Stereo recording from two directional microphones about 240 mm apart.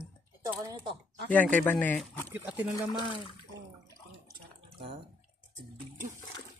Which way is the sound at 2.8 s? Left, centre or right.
Centre.